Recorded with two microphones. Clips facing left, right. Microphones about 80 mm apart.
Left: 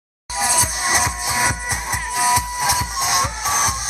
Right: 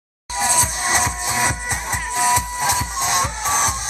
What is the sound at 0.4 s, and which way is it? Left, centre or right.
Music, centre.